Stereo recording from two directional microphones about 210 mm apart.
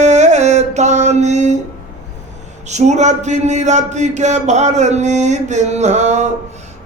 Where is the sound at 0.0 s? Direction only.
35° right (ahead or behind).